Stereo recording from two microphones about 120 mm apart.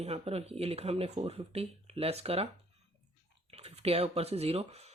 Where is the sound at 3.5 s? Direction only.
55° right (ahead or behind).